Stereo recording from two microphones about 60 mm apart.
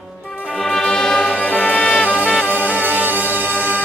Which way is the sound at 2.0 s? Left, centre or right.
Right.